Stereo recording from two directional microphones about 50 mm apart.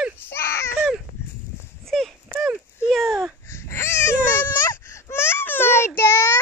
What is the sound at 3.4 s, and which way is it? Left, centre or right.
Baby cry, left.